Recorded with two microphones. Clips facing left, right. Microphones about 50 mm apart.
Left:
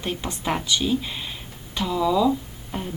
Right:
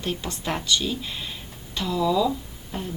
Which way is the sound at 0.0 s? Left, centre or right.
Centre.